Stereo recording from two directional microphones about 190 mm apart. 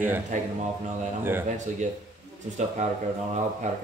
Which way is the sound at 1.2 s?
10° right (ahead or behind).